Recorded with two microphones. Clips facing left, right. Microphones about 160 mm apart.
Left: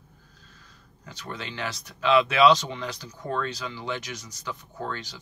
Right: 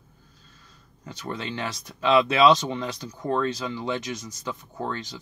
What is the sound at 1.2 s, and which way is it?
Speech, 25° right (ahead or behind).